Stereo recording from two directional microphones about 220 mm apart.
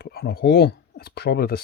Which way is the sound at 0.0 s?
45° left (ahead or behind).